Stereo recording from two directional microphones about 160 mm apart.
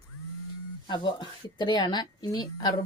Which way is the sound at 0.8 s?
30° left (ahead or behind).